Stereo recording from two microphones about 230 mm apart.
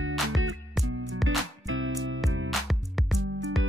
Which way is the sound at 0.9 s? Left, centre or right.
Right.